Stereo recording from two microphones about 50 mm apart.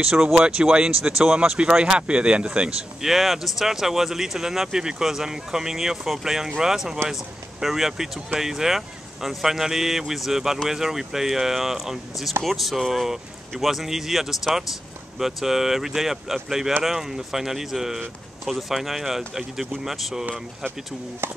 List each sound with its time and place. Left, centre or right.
0.0 s speech: centre
3.0 s speech: centre
21.2 s speech: right